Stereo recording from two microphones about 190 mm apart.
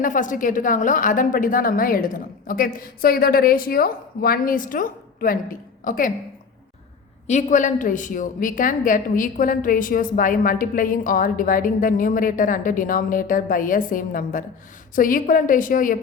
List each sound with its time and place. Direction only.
0.0 s a woman's voice: 45° left (ahead or behind)
7.3 s a woman's voice: 40° left (ahead or behind)